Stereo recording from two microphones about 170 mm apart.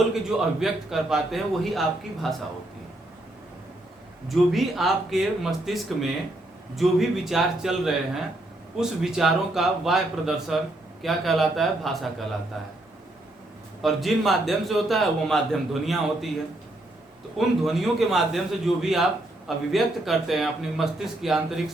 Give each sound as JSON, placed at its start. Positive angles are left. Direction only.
{"t": 0.1, "sound": "a man's voice", "side_deg": 0}
{"t": 4.3, "sound": "a man's voice", "side_deg": 0}
{"t": 13.8, "sound": "a man's voice", "side_deg": 0}
{"t": 17.3, "sound": "a man's voice", "side_deg": 0}